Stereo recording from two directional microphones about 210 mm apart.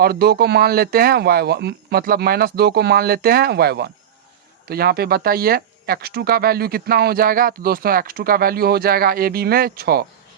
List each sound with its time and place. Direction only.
0.0 s speech: 50° right (ahead or behind)